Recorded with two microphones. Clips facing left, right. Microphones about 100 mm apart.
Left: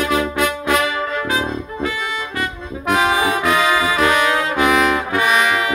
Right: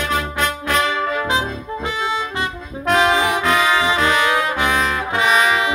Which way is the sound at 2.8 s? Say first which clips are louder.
Right 1 dB; 10° left (ahead or behind).